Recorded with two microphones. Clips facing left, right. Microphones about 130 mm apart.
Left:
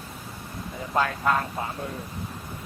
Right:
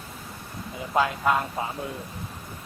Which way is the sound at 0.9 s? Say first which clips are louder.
Right 1 dB; 10° right (ahead or behind).